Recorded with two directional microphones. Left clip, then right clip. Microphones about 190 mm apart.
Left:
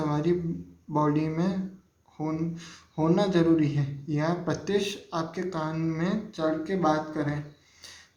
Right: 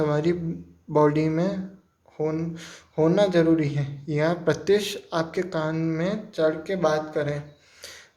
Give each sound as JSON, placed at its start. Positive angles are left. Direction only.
{"t": 0.0, "sound": "a man's voice", "side_deg": -35}